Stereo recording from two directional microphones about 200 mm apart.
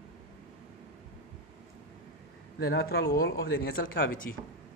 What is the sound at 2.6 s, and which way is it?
Speech, 50° left (ahead or behind).